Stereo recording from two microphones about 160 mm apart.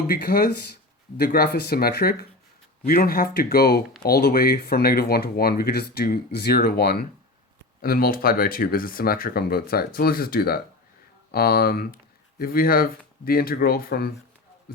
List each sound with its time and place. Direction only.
0.1 s speech: 75° left (ahead or behind)